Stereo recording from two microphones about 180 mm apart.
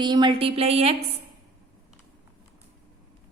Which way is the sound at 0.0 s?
25° right (ahead or behind).